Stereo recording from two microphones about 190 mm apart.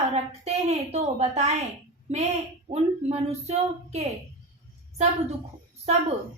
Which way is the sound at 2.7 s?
35° right (ahead or behind).